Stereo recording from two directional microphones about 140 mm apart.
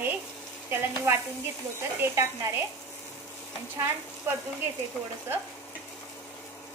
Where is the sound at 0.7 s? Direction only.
15° right (ahead or behind).